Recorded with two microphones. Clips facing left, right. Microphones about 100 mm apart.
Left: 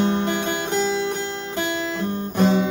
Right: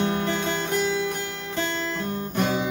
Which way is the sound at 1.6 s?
10° left (ahead or behind).